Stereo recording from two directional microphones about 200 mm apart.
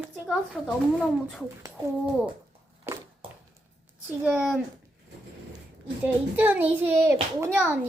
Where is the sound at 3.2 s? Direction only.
25° right (ahead or behind).